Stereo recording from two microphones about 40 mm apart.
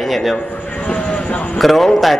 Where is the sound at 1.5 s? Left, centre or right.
Centre.